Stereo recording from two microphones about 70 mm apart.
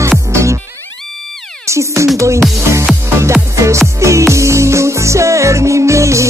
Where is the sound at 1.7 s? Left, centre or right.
Right.